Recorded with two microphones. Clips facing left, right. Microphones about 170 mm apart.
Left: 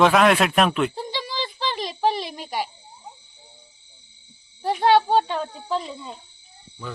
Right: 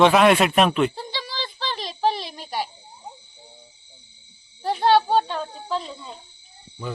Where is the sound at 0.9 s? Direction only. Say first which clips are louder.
Left 3 dB; 15° left (ahead or behind).